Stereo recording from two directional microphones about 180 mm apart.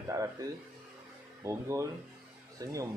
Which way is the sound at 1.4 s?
15° right (ahead or behind).